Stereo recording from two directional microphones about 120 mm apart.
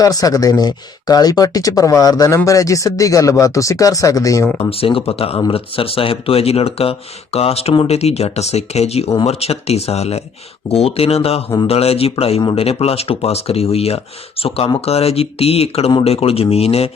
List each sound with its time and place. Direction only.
0.0 s speech: 30° left (ahead or behind)
4.7 s speech: 50° left (ahead or behind)